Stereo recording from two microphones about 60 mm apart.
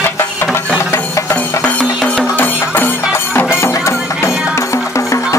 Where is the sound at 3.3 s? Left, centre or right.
Left.